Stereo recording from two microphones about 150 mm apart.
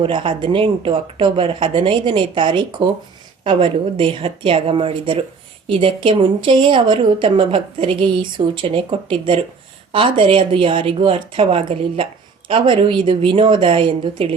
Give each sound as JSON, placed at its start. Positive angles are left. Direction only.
{"t": 0.0, "sound": "a woman's voice", "side_deg": -35}